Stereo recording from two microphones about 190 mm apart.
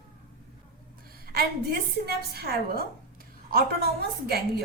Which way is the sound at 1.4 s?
55° right (ahead or behind).